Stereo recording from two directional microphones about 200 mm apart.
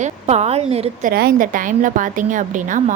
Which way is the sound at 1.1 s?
45° right (ahead or behind).